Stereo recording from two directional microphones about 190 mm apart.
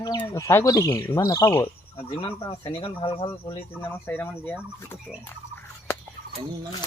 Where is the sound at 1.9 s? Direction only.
25° left (ahead or behind).